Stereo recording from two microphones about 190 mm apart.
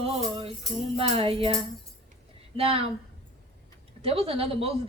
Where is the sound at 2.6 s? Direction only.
30° right (ahead or behind).